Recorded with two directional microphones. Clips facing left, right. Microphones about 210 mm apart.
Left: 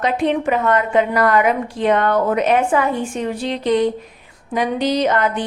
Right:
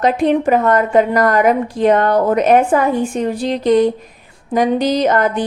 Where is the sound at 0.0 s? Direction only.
40° right (ahead or behind).